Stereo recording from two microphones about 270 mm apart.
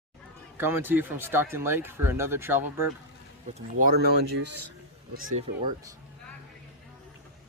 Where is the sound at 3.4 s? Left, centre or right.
Right.